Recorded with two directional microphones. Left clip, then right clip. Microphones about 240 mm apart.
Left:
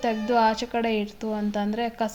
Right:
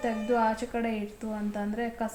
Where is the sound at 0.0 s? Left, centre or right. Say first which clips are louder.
Left 5 dB; left.